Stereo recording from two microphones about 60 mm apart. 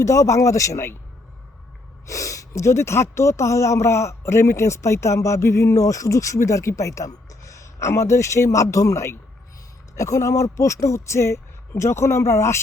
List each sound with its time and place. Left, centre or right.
0.0 s speech: left
2.0 s speech: left